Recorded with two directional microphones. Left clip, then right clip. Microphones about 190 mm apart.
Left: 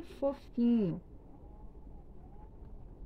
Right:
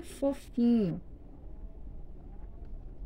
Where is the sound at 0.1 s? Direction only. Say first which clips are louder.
Right 2 dB; 25° left (ahead or behind).